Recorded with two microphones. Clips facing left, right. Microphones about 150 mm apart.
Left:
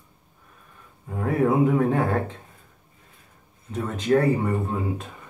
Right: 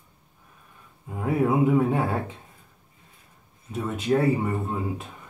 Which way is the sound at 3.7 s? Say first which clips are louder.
Left 2 dB; 5° right (ahead or behind).